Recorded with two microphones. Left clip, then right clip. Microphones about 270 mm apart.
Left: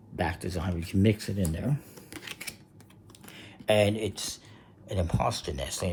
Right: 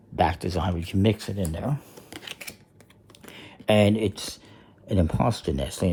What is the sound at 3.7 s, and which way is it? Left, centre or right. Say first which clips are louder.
Speech: right 3 dB; right.